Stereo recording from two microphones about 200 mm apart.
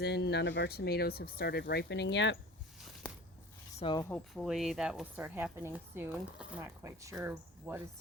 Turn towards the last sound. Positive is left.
turn(degrees=-10)  # may be behind; listen again after turning